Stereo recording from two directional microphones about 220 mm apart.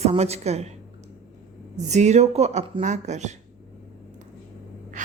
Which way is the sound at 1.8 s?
30° right (ahead or behind).